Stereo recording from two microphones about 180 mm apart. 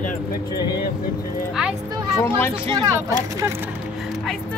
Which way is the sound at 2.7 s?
20° right (ahead or behind).